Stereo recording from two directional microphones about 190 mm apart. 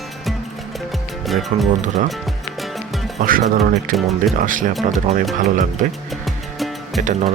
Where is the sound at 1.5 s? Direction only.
35° right (ahead or behind).